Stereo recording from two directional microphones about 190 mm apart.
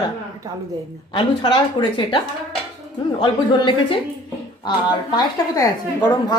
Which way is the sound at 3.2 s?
25° left (ahead or behind).